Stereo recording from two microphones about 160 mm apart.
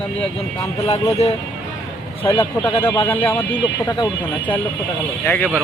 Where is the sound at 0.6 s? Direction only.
20° left (ahead or behind).